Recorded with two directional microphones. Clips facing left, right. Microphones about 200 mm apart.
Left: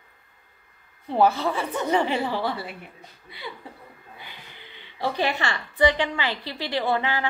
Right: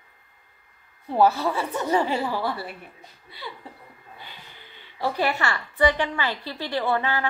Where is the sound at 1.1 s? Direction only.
20° left (ahead or behind).